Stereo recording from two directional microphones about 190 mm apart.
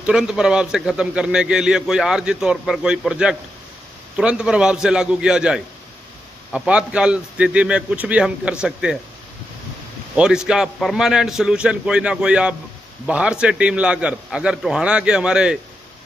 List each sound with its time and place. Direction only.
0.0 s a man's voice: 5° right (ahead or behind)
10.1 s a man's voice: 5° right (ahead or behind)